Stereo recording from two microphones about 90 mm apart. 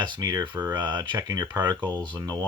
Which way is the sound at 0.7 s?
50° right (ahead or behind).